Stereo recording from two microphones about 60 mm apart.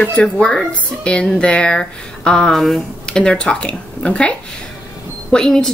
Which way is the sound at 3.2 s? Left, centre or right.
Centre.